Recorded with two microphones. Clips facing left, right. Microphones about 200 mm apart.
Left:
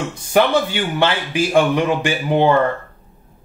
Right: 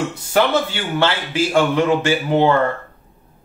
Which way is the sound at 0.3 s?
15° left (ahead or behind).